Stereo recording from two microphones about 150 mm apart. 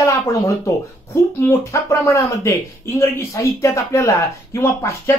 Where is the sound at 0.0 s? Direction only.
20° left (ahead or behind).